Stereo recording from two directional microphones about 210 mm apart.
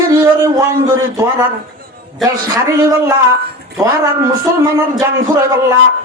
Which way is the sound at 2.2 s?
15° right (ahead or behind).